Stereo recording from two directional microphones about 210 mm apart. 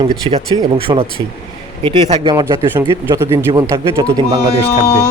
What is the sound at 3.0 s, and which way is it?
A man's voice, 10° right (ahead or behind).